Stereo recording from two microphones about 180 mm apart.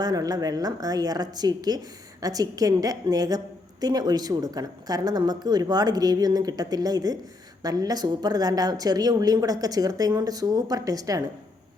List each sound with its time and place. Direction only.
0.0 s a woman's voice: 20° right (ahead or behind)